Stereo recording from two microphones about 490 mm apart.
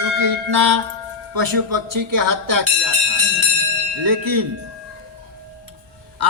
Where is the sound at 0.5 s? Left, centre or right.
Right.